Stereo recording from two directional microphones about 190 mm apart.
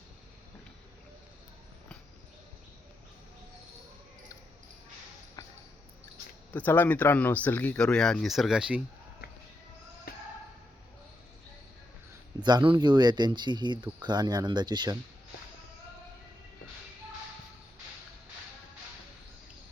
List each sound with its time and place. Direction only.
6.5 s speech: 10° left (ahead or behind)
10.1 s a sound: 50° left (ahead or behind)
12.4 s speech: 25° right (ahead or behind)